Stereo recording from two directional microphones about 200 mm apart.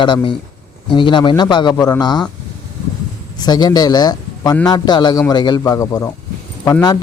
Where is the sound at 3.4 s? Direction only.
20° left (ahead or behind).